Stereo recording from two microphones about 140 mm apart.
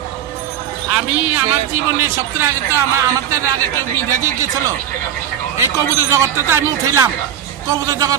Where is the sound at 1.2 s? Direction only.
10° right (ahead or behind).